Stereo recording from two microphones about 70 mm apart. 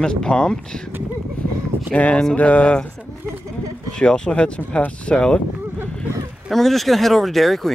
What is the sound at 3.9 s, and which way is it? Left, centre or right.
Speech, centre.